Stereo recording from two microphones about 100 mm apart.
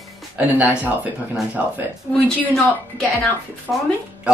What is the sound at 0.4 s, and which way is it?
Speech, 15° right (ahead or behind).